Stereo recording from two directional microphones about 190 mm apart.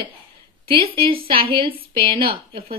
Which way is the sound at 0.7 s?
30° right (ahead or behind).